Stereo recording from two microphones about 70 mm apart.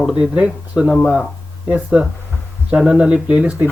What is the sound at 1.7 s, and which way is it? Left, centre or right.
Speech, centre.